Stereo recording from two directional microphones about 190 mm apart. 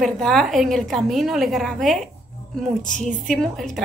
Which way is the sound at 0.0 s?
Centre (ahead or behind).